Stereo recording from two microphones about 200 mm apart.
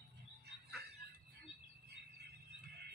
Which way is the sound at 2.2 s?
55° right (ahead or behind).